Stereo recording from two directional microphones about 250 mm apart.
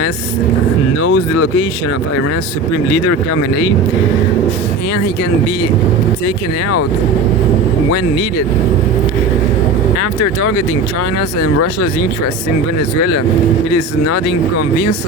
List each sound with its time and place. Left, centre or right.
0.9 s speech: left
10.0 s speech: left
11.6 s speech: left